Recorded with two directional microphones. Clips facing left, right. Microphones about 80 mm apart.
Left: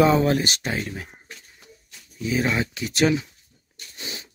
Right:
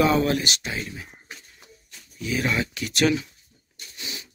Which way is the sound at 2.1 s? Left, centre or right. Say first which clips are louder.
Left 2 dB; left.